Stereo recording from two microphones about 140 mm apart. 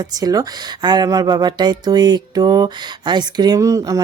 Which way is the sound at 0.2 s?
25° right (ahead or behind).